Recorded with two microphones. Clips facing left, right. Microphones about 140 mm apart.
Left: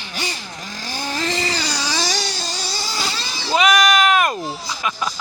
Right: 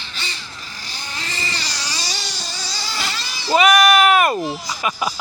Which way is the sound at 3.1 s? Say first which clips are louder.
Right 4 dB; centre (ahead or behind).